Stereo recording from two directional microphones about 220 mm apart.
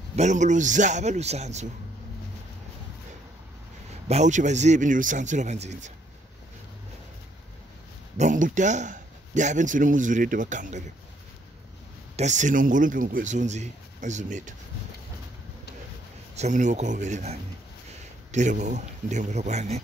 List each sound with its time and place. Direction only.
0.1 s a man's voice: 30° right (ahead or behind)
4.1 s a man's voice: 35° right (ahead or behind)
8.2 s a man's voice: 35° right (ahead or behind)
12.2 s a man's voice: 35° right (ahead or behind)
16.3 s a man's voice: 35° right (ahead or behind)